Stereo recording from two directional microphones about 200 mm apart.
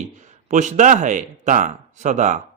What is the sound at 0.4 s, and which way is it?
Speech, 35° right (ahead or behind).